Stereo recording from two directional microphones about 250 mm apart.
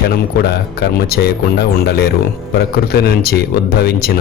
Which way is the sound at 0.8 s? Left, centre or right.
Left.